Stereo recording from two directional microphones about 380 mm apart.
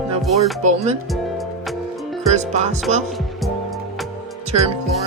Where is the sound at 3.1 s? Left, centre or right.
Centre.